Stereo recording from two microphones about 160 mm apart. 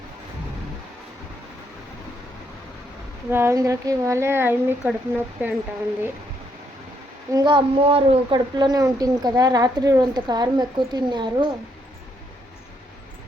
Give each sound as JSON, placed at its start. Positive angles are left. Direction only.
{"t": 3.3, "sound": "speech", "side_deg": -15}
{"t": 7.3, "sound": "a woman's voice", "side_deg": -25}